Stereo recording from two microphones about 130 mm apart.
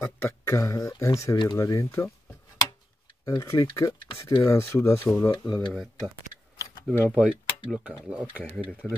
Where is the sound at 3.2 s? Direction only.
25° left (ahead or behind).